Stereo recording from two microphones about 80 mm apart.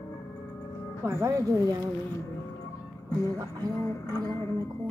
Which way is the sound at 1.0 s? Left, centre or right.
Right.